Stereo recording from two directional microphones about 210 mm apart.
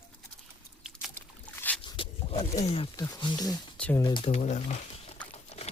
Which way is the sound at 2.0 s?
30° left (ahead or behind).